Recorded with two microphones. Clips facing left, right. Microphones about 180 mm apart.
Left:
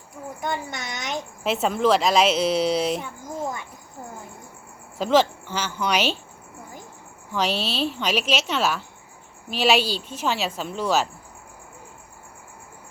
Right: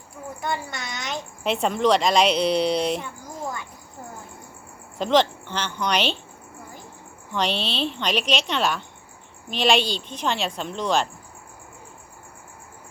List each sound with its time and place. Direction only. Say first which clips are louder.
0.4 s a child's voice: even; 20° left (ahead or behind)
1.5 s speech: even; centre (ahead or behind)
4.9 s speech: left 1 dB; 5° left (ahead or behind)
7.3 s speech: left 1 dB; 5° left (ahead or behind)